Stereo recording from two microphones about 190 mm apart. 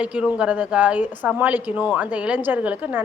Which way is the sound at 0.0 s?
5° right (ahead or behind).